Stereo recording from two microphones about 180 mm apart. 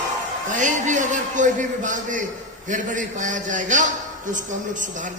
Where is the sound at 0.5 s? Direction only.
45° right (ahead or behind).